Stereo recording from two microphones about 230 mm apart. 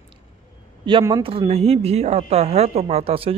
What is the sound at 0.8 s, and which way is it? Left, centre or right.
Speech, centre.